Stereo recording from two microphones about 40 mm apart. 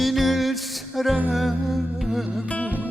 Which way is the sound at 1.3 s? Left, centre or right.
Centre.